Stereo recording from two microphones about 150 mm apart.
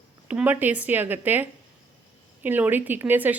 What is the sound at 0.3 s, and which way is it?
A woman's voice, 10° right (ahead or behind).